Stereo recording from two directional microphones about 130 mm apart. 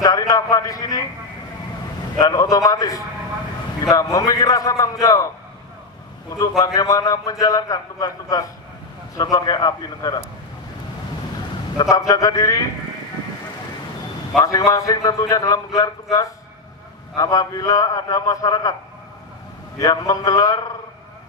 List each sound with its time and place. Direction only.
0.0 s a man's voice: 30° left (ahead or behind)
2.1 s a man's voice: 30° left (ahead or behind)
6.6 s a man's voice: 25° left (ahead or behind)
11.7 s a man's voice: 25° left (ahead or behind)
14.4 s a man's voice: 25° left (ahead or behind)
19.8 s a man's voice: 25° left (ahead or behind)